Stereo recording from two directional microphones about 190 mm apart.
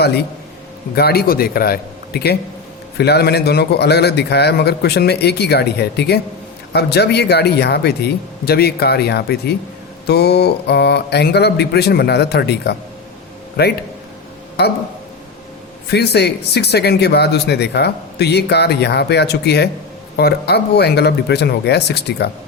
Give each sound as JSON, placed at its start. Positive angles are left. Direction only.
{"t": 0.9, "sound": "a man's voice", "side_deg": 55}
{"t": 15.9, "sound": "speech", "side_deg": 60}